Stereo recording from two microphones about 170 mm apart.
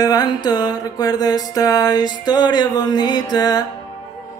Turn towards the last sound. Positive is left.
turn(degrees=25)  # may be behind; listen again after turning